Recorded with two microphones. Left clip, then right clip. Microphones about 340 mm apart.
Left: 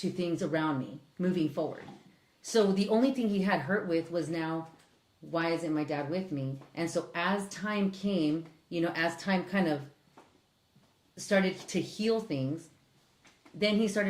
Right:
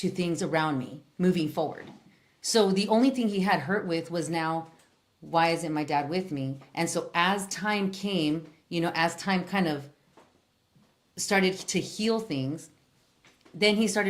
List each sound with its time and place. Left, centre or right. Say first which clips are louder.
0.2 s a woman's voice: right 4 dB; right
2.4 s a woman's voice: right 3 dB; right
11.1 s a woman's voice: right 3 dB; right
13.6 s speech: right 4 dB; right